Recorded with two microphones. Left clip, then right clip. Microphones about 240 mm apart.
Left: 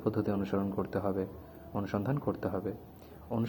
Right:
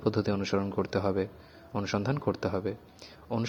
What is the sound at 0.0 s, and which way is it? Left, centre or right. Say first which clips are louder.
A man's voice: right 3 dB; right.